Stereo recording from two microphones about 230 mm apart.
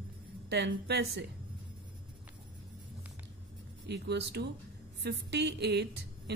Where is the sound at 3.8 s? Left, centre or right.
Right.